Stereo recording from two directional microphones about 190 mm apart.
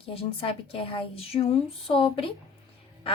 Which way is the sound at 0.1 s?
30° left (ahead or behind).